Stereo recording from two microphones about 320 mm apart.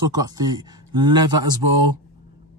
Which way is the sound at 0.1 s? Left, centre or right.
Centre.